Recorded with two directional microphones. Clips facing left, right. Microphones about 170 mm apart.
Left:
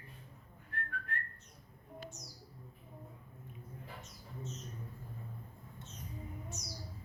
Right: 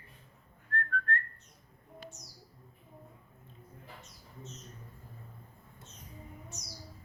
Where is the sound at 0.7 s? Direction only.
10° left (ahead or behind).